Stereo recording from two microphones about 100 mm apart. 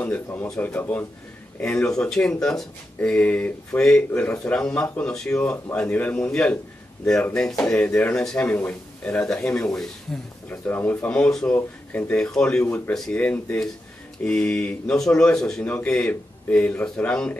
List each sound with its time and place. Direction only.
0.0 s speech: 20° left (ahead or behind)
10.5 s speech: 20° left (ahead or behind)
11.1 s speech: 10° left (ahead or behind)